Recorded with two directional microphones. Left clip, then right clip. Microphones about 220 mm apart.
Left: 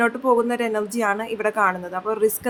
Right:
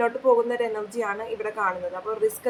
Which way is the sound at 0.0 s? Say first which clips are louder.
Left 2 dB; 40° left (ahead or behind).